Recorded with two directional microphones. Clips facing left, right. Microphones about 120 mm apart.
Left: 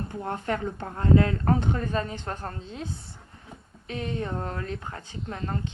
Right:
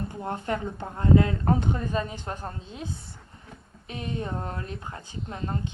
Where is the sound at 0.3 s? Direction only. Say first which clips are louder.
Left 1 dB; 20° right (ahead or behind).